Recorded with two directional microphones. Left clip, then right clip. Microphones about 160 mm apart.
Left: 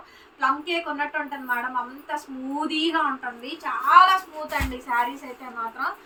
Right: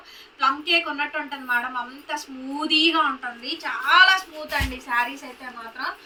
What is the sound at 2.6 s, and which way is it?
A woman's voice, 10° left (ahead or behind).